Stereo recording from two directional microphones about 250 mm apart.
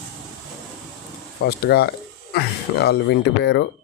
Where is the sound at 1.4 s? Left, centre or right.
Left.